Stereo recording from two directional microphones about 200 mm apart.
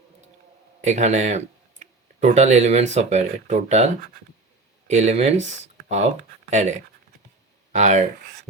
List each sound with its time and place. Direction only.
0.8 s speech: 35° right (ahead or behind)